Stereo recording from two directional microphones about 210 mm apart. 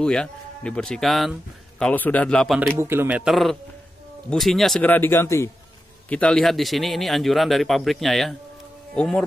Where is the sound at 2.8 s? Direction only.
10° right (ahead or behind).